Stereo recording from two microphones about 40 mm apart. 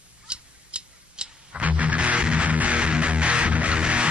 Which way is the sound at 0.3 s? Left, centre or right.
Right.